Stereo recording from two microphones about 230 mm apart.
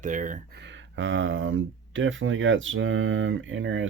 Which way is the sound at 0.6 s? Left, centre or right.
Right.